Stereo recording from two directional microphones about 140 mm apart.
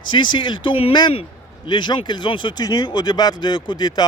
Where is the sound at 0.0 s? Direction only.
35° left (ahead or behind).